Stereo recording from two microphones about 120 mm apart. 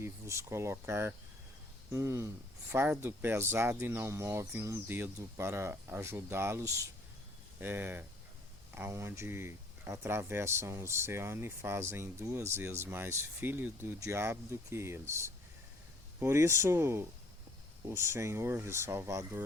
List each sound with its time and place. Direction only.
0.0 s speech: 25° right (ahead or behind)